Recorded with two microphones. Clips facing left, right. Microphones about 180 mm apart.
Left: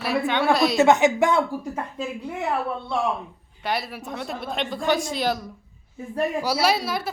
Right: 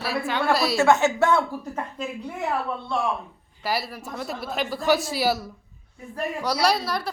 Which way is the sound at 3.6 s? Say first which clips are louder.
Even; centre (ahead or behind).